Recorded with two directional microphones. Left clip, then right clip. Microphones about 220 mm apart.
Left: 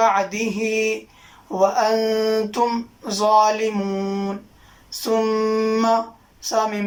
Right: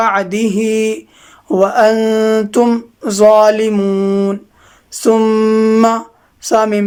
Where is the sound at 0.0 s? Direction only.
45° right (ahead or behind).